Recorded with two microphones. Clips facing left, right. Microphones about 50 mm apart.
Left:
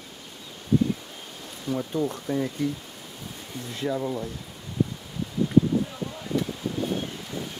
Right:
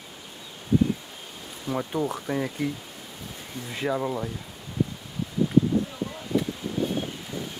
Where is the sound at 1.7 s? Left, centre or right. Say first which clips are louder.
Even; right.